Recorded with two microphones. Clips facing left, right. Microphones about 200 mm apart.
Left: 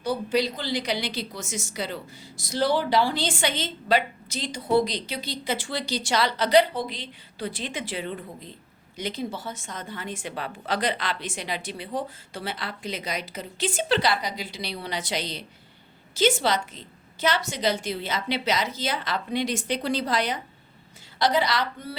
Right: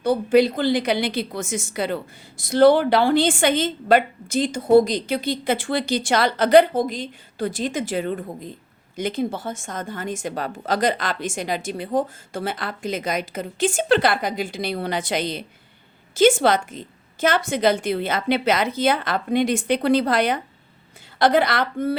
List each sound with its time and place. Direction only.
0.0 s a woman's voice: 55° right (ahead or behind)